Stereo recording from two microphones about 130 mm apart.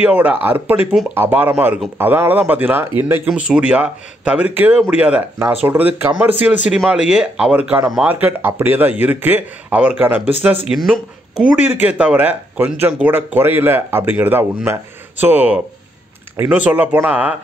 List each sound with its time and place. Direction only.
0.0 s speech: 15° right (ahead or behind)
3.3 s speech: 5° right (ahead or behind)
11.5 s speech: 15° right (ahead or behind)